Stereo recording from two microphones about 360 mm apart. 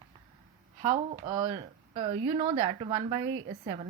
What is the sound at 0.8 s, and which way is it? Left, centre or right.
A woman's voice, right.